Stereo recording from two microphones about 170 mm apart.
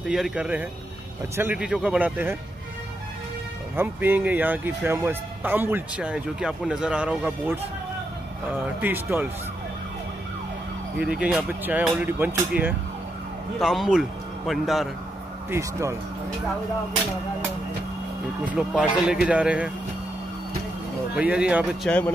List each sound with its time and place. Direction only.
0.0 s a man's voice: 5° right (ahead or behind)
3.7 s speech: 10° right (ahead or behind)
8.8 s speech: 10° right (ahead or behind)
11.0 s a man's voice: 5° right (ahead or behind)
15.5 s speech: 15° right (ahead or behind)
18.5 s speech: 5° right (ahead or behind)
21.1 s speech: 5° right (ahead or behind)
21.8 s speech: 5° left (ahead or behind)